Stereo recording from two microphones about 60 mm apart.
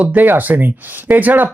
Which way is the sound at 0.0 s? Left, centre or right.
Right.